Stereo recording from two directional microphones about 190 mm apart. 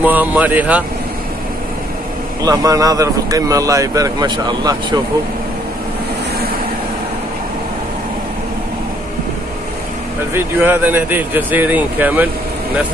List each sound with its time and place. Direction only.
0.0 s speech: 10° right (ahead or behind)
2.4 s speech: 20° right (ahead or behind)
10.3 s speech: 10° right (ahead or behind)